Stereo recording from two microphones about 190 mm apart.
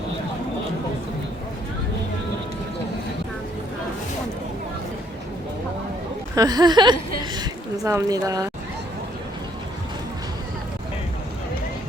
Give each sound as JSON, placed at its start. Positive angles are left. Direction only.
{"t": 6.3, "sound": "a woman's voice", "side_deg": -20}